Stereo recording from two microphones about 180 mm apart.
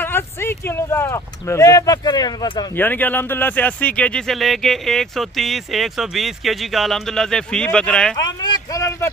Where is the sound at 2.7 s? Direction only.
10° left (ahead or behind).